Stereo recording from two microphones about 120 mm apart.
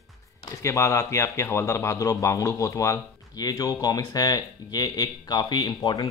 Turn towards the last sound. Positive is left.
turn(degrees=35)  # may be behind; listen again after turning